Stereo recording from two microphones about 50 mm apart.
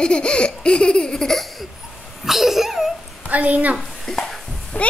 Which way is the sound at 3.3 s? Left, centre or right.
Right.